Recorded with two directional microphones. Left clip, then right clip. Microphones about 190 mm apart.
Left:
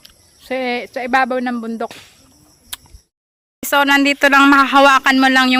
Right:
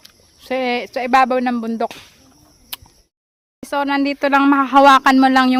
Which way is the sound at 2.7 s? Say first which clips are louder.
Even; 10° right (ahead or behind).